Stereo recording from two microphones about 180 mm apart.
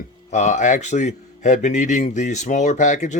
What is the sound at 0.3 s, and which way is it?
A man's voice, 40° left (ahead or behind).